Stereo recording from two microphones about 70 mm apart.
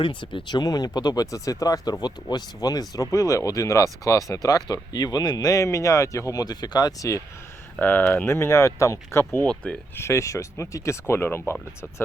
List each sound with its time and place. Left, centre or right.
0.4 s speech: left
6.4 s speech: left
7.8 s speech: left
8.3 s speech: left
9.7 s speech: centre
10.0 s speech: left
11.0 s speech: left